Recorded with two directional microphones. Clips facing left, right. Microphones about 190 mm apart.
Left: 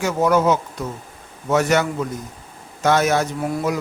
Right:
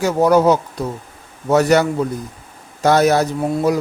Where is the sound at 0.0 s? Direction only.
35° right (ahead or behind).